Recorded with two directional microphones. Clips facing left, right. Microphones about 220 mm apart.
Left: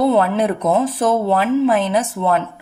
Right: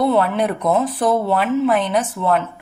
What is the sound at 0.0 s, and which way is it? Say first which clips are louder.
Speech: left 2 dB; 25° left (ahead or behind).